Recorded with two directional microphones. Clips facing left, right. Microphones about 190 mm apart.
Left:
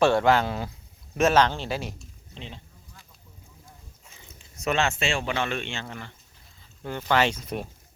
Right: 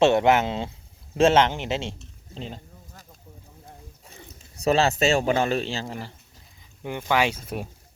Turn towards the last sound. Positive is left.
turn(degrees=-10)  # may be behind; listen again after turning